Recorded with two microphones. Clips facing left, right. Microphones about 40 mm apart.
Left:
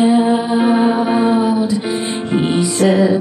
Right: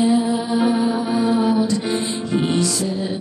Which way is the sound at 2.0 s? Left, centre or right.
Left.